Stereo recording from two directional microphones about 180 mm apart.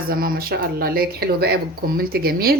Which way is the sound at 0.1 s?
55° right (ahead or behind).